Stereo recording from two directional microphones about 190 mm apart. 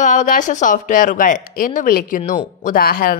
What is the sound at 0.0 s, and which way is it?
Speech, 40° left (ahead or behind).